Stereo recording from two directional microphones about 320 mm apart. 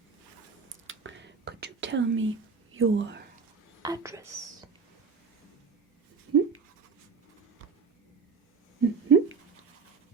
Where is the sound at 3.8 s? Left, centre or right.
Centre.